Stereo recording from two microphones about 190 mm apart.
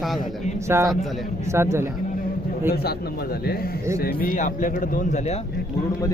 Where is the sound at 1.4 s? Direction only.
15° right (ahead or behind).